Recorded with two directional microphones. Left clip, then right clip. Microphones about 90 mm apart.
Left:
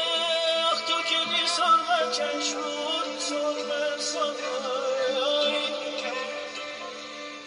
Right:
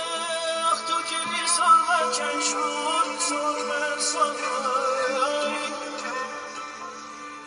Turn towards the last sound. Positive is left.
turn(degrees=15)  # may be behind; listen again after turning